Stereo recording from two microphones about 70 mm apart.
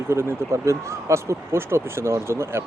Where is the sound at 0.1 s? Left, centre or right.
Right.